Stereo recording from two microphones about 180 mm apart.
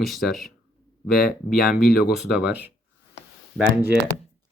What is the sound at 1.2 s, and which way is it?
Speech, 55° left (ahead or behind).